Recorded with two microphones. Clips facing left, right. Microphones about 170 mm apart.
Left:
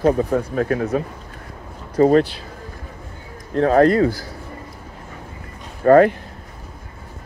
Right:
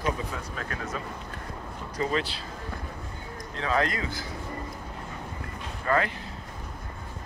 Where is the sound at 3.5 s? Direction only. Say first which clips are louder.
Left 13 dB; 50° left (ahead or behind).